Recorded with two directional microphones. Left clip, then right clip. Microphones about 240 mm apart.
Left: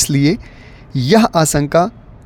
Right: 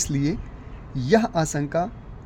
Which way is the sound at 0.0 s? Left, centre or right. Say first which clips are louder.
Left 11 dB; left.